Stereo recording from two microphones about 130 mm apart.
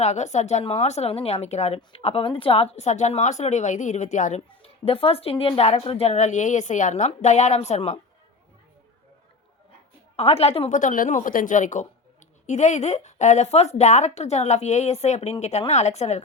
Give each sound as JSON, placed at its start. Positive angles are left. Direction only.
{"t": 0.0, "sound": "speech", "side_deg": 60}
{"t": 4.4, "sound": "a woman's voice", "side_deg": 45}
{"t": 7.1, "sound": "speech", "side_deg": 60}
{"t": 10.2, "sound": "a woman's voice", "side_deg": 50}
{"t": 10.7, "sound": "speech", "side_deg": 75}